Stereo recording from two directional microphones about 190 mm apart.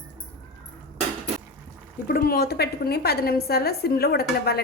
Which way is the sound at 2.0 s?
50° left (ahead or behind).